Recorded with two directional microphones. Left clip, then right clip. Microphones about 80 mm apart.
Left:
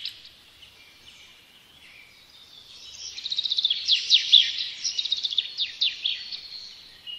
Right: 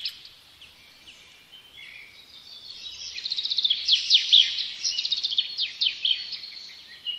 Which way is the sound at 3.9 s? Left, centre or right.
Centre.